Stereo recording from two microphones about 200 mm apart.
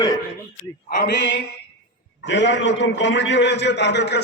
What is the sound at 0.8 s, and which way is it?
A man's voice, 60° left (ahead or behind).